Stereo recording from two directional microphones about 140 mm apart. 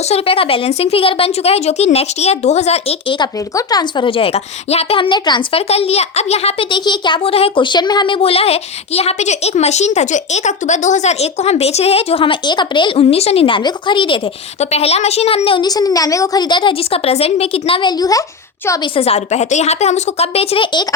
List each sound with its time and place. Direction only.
0.1 s a woman's voice: 40° left (ahead or behind)
3.1 s a woman's voice: 30° left (ahead or behind)
5.6 s a woman's voice: 45° left (ahead or behind)
6.7 s a woman's voice: 30° left (ahead or behind)
14.6 s a woman's voice: 50° left (ahead or behind)
15.6 s a woman's voice: 30° left (ahead or behind)
18.9 s a woman's voice: 45° left (ahead or behind)